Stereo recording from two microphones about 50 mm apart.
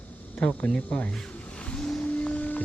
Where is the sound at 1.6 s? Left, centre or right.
Centre.